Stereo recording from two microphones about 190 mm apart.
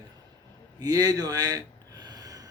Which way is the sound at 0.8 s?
20° right (ahead or behind).